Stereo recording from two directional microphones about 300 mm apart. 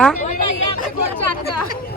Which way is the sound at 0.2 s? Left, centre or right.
Left.